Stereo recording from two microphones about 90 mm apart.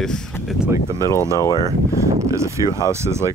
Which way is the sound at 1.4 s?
45° left (ahead or behind).